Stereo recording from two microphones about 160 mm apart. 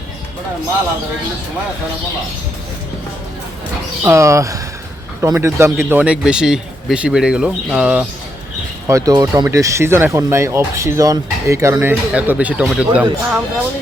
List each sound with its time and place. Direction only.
4.0 s speech: 20° right (ahead or behind)
8.9 s speech: 20° right (ahead or behind)